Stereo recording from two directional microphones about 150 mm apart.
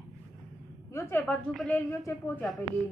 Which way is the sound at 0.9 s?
20° left (ahead or behind).